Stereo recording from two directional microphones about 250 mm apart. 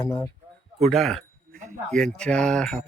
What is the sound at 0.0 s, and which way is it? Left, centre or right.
Wind chime, centre.